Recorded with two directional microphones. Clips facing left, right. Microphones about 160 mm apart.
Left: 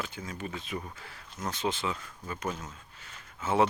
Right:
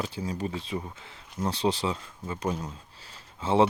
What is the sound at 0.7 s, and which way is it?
Speech, 15° right (ahead or behind).